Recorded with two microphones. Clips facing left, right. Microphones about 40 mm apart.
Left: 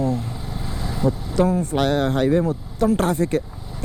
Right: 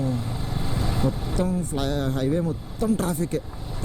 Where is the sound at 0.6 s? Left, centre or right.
Centre.